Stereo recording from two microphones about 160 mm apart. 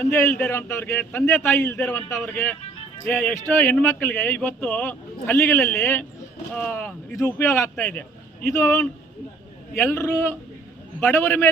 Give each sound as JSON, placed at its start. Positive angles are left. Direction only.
{"t": 0.0, "sound": "a man's voice", "side_deg": 15}